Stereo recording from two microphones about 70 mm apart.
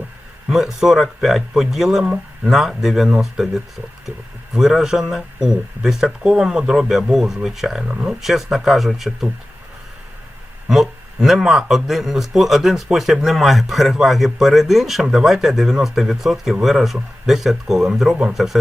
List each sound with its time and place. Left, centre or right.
0.5 s a man's voice: centre
7.9 s speech: centre
8.2 s a man's voice: centre
10.7 s a man's voice: centre